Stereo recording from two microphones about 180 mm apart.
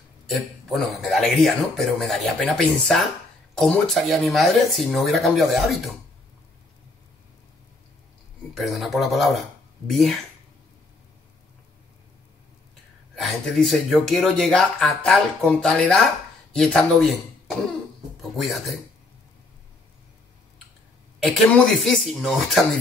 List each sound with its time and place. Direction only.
0.3 s speech: centre (ahead or behind)
8.5 s speech: centre (ahead or behind)
13.1 s speech: centre (ahead or behind)
21.2 s speech: centre (ahead or behind)